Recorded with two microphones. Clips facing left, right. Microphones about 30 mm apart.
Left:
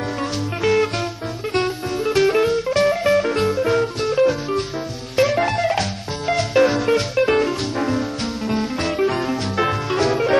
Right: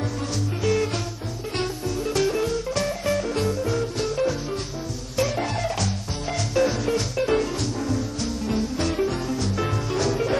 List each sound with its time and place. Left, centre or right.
0.6 s music: left
2.0 s music: left